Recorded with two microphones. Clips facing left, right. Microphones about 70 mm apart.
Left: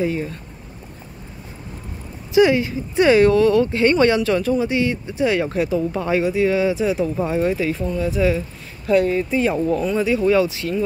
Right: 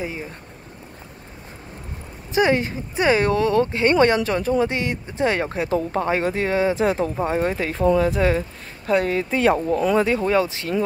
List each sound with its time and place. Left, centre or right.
0.0 s speech: centre
2.3 s speech: right
3.0 s speech: right
4.6 s speech: right
5.7 s speech: right
9.0 s speech: right
10.0 s speech: right